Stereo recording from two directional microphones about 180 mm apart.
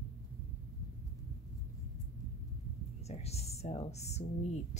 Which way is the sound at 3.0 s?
35° left (ahead or behind).